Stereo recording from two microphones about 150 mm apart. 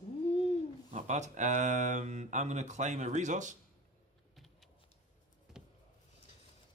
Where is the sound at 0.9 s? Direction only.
50° right (ahead or behind).